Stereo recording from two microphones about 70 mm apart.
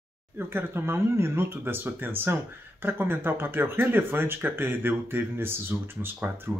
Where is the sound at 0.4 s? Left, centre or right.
Right.